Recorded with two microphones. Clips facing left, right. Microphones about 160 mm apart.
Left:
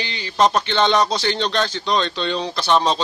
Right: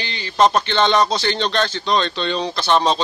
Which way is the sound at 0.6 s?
10° left (ahead or behind).